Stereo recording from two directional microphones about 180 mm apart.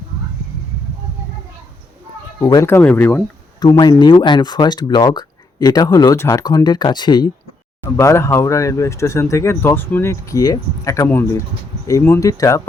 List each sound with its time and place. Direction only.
2.4 s speech: 15° left (ahead or behind)